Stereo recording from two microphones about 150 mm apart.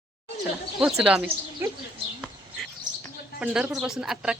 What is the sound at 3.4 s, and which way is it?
Speech, 5° right (ahead or behind).